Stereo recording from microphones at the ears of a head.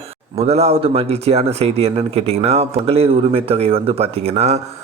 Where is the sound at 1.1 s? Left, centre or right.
Right.